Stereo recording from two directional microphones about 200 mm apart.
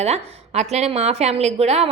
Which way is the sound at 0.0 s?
35° right (ahead or behind).